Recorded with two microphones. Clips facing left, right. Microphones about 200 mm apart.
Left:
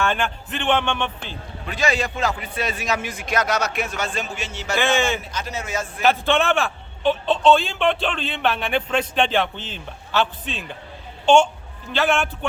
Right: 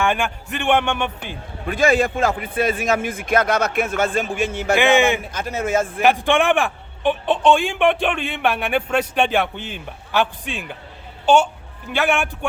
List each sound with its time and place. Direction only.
0.0 s a man's voice: 10° right (ahead or behind)
1.6 s a man's voice: 50° right (ahead or behind)
6.0 s a man's voice: 15° right (ahead or behind)
11.9 s a man's voice: 10° right (ahead or behind)